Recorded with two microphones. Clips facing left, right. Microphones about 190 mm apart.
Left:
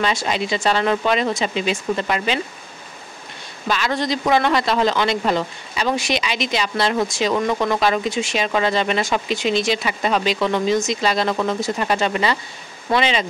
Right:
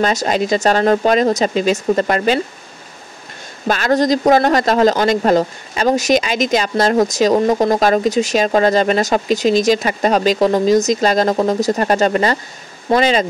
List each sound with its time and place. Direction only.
0.0 s speech: 45° right (ahead or behind)
3.6 s speech: 45° right (ahead or behind)